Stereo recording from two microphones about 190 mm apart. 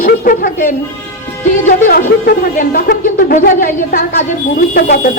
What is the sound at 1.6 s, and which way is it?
Speech, 45° left (ahead or behind).